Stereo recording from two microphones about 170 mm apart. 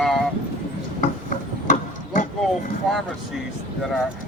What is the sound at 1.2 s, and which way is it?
Vehicle, 50° left (ahead or behind).